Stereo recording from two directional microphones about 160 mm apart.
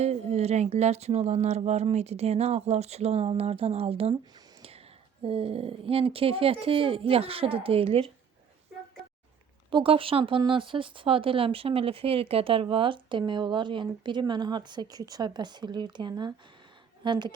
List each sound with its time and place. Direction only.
0.0 s a sound: 40° right (ahead or behind)
5.2 s speech: 35° right (ahead or behind)
9.6 s a woman's voice: 30° right (ahead or behind)